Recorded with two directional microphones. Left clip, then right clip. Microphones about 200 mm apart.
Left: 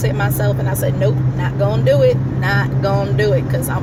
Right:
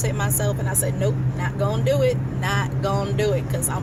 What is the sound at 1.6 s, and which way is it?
Speech, 20° right (ahead or behind).